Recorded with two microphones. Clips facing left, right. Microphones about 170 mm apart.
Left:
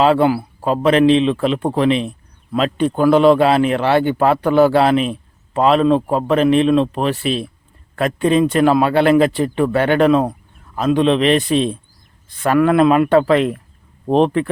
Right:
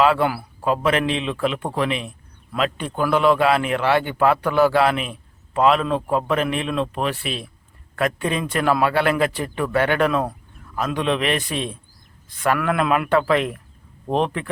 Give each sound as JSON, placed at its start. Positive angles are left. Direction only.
{"t": 0.0, "sound": "a man's voice", "side_deg": 30}